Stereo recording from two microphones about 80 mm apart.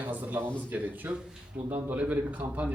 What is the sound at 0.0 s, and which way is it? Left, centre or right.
A man's voice, right.